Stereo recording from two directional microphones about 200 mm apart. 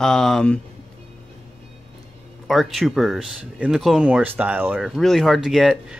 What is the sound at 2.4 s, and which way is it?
Speech, centre (ahead or behind).